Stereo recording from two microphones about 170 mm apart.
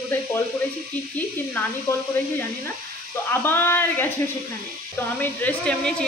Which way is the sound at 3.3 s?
15° left (ahead or behind).